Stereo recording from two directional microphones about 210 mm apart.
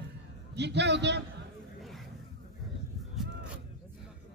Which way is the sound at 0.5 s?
55° right (ahead or behind).